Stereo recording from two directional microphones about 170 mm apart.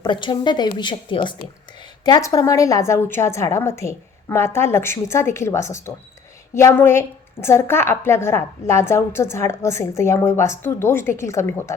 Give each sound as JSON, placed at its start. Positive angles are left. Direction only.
{"t": 0.0, "sound": "a woman's voice", "side_deg": 25}